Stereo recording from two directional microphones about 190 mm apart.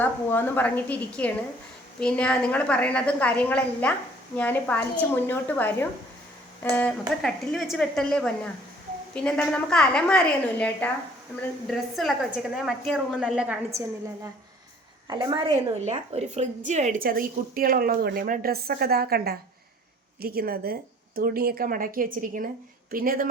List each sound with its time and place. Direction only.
0.0 s a woman's voice: 10° left (ahead or behind)
11.9 s a woman's voice: centre (ahead or behind)
15.0 s a woman's voice: 20° right (ahead or behind)
15.8 s a woman's voice: 35° right (ahead or behind)